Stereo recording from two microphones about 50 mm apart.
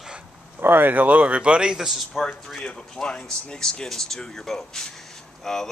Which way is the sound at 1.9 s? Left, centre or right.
Centre.